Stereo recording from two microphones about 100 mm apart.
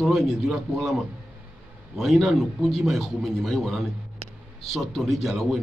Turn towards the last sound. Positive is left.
turn(degrees=0)  # may be behind; listen again after turning